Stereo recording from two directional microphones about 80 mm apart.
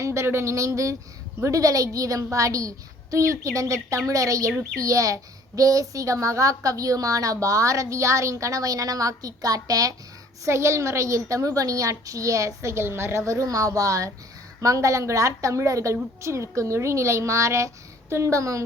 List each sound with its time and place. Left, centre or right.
0.0 s a woman's voice: right
10.4 s a woman's voice: right